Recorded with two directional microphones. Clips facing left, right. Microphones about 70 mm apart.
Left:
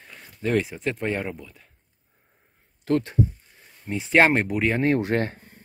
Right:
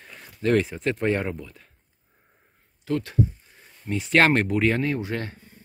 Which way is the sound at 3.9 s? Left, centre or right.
Centre.